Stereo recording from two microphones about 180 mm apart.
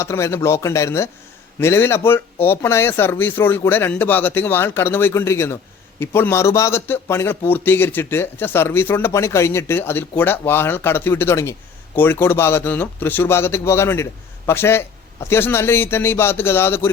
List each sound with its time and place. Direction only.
0.0 s a man's voice: 15° left (ahead or behind)